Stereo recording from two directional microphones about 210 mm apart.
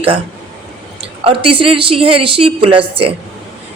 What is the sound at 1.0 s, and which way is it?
A woman's voice, 25° right (ahead or behind).